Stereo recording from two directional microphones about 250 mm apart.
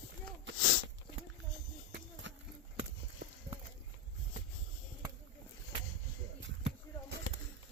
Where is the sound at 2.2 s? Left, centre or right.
Right.